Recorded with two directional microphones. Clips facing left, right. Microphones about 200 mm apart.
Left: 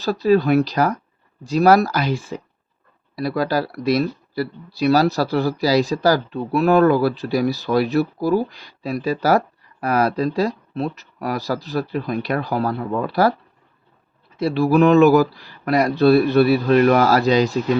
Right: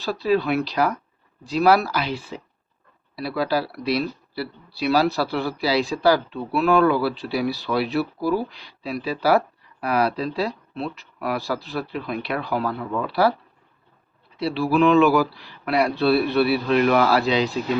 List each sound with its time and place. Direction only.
0.0 s speech: 40° left (ahead or behind)
14.3 s speech: 45° left (ahead or behind)